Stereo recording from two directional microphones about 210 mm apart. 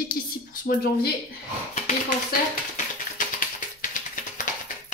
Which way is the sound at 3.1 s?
40° left (ahead or behind).